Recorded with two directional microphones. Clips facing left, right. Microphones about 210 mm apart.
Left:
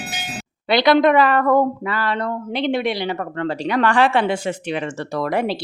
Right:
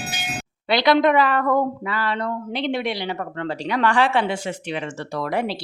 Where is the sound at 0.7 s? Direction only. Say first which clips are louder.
Left 3 dB; 55° left (ahead or behind).